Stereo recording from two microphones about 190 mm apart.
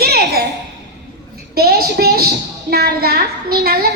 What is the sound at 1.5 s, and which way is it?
A child's voice, 55° right (ahead or behind).